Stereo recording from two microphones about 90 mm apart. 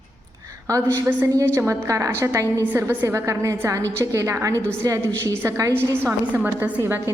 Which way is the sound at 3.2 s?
35° right (ahead or behind).